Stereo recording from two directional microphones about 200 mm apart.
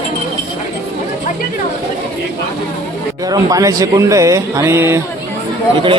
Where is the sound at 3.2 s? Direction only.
20° right (ahead or behind).